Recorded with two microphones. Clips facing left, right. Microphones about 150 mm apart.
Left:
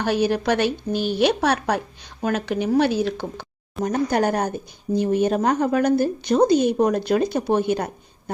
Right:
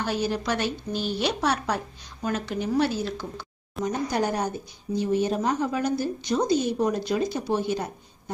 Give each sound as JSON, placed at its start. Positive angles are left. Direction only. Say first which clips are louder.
{"t": 0.0, "sound": "speech", "louder": "left 6 dB", "side_deg": 65}
{"t": 3.8, "sound": "speech", "louder": "left 5 dB", "side_deg": 60}